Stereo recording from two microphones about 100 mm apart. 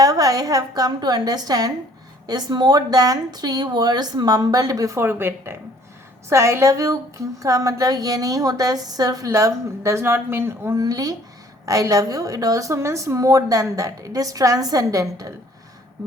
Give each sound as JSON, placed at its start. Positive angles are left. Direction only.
{"t": 0.0, "sound": "a woman's voice", "side_deg": -40}
{"t": 10.8, "sound": "a woman's voice", "side_deg": -35}